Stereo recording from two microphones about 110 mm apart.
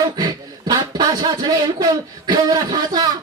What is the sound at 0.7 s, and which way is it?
Speech, 40° right (ahead or behind).